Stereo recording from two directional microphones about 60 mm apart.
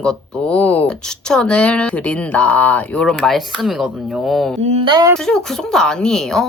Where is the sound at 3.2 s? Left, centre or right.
Centre.